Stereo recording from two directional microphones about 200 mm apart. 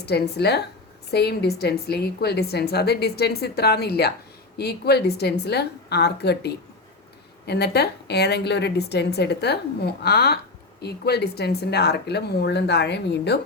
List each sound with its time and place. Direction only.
0.0 s a woman's voice: 55° left (ahead or behind)